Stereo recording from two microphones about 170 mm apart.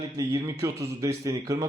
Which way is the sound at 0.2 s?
20° right (ahead or behind).